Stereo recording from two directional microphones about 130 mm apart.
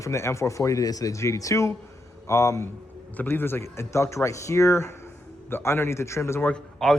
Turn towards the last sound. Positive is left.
turn(degrees=5)  # may be behind; listen again after turning